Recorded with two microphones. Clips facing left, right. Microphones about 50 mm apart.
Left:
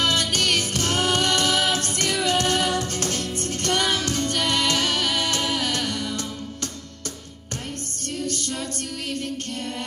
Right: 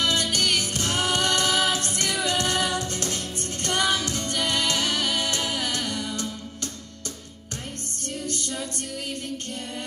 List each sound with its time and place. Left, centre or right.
0.0 s music: left